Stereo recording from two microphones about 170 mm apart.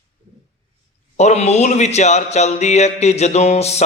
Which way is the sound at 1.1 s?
40° left (ahead or behind).